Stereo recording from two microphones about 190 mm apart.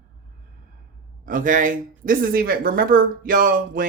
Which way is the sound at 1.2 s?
45° right (ahead or behind).